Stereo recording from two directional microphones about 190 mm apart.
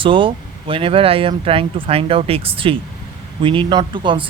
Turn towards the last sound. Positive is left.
turn(degrees=-25)  # may be behind; listen again after turning